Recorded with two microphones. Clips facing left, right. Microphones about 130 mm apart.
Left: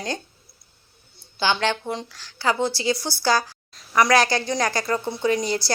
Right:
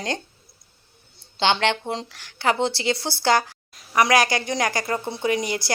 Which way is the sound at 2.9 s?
70° right (ahead or behind).